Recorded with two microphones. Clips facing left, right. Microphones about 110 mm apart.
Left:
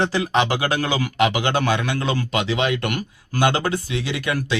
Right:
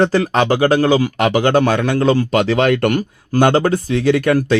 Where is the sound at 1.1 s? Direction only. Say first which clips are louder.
Right 6 dB; 45° right (ahead or behind).